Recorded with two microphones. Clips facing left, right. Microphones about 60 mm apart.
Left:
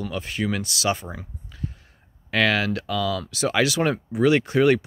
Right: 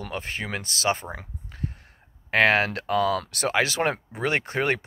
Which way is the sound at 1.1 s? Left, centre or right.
Right.